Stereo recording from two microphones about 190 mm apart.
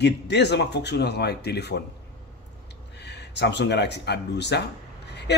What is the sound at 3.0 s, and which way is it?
Speech, 65° left (ahead or behind).